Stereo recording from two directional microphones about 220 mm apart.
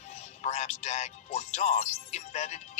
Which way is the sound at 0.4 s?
30° left (ahead or behind).